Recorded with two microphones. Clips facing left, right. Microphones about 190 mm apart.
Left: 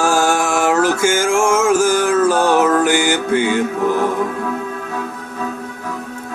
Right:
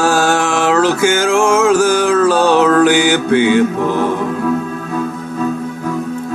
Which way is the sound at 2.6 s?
70° right (ahead or behind).